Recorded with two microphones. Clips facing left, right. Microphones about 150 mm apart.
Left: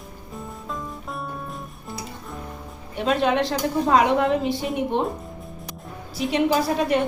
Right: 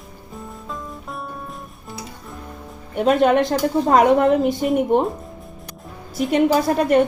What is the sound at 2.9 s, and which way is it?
A woman's voice, 50° right (ahead or behind).